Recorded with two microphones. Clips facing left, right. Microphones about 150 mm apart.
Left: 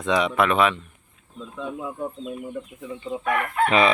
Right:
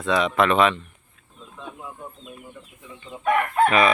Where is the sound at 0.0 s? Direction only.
15° left (ahead or behind).